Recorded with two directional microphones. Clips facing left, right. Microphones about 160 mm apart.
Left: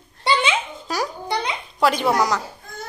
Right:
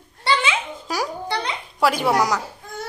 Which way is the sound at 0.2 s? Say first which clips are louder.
Left 1 dB; 20° left (ahead or behind).